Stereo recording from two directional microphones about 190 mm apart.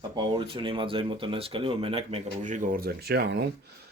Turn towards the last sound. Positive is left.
turn(degrees=-60)  # may be behind; listen again after turning